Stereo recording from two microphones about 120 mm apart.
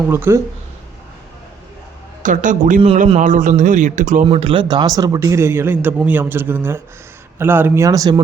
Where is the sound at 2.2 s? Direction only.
90° right.